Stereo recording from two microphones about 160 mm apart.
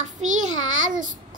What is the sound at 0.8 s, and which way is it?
Child singing, 55° right (ahead or behind).